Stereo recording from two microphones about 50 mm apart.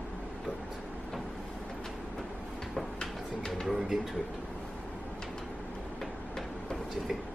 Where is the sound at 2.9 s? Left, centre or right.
Centre.